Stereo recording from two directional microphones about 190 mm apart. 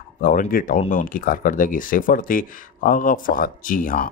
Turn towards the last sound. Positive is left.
turn(degrees=45)  # may be behind; listen again after turning